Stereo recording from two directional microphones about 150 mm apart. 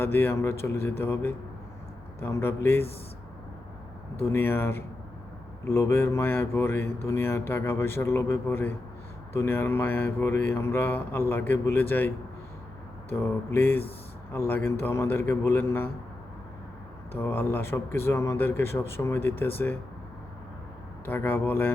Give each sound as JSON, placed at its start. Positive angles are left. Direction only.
{"t": 0.0, "sound": "speech", "side_deg": 15}
{"t": 4.2, "sound": "speech", "side_deg": 15}
{"t": 17.1, "sound": "speech", "side_deg": 15}
{"t": 21.0, "sound": "speech", "side_deg": 15}